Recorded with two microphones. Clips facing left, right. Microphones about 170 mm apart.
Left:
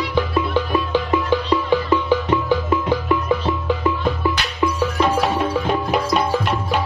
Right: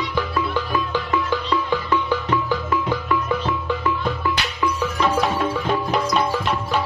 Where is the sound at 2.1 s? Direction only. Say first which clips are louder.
Left 4 dB; 15° left (ahead or behind).